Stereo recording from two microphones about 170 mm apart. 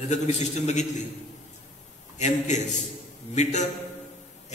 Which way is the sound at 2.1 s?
45° left (ahead or behind).